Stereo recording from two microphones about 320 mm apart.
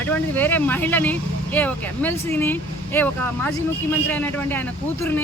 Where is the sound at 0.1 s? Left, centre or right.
Centre.